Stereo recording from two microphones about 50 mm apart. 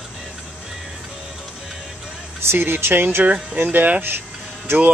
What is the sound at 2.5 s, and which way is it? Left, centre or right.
Speech, right.